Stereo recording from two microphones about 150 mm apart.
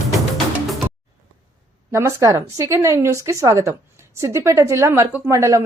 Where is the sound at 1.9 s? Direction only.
15° right (ahead or behind).